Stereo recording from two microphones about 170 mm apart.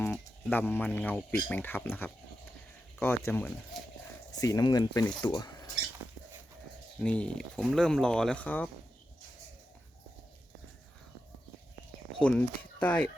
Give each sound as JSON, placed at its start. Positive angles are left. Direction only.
{"t": 0.1, "sound": "speech", "side_deg": 5}
{"t": 7.0, "sound": "speech", "side_deg": 5}
{"t": 12.2, "sound": "speech", "side_deg": 5}